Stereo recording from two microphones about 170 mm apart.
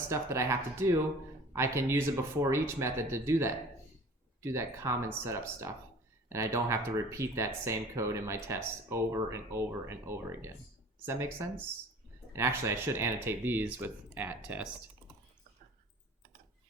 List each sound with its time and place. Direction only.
0.1 s speech: 15° right (ahead or behind)